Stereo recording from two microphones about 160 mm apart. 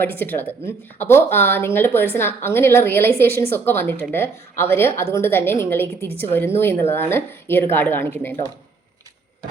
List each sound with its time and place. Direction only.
0.0 s speech: 10° left (ahead or behind)